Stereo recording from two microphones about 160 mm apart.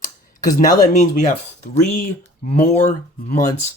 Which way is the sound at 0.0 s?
55° left (ahead or behind).